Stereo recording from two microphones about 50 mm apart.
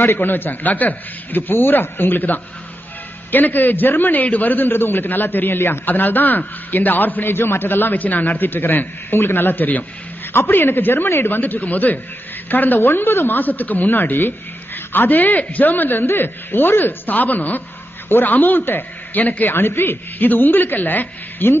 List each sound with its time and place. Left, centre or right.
0.0 s a man's voice: left
19.5 s a man's voice: left